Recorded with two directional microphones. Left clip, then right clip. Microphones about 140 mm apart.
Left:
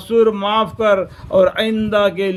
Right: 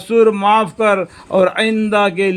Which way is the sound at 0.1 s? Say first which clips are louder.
Right 3 dB; 45° right (ahead or behind).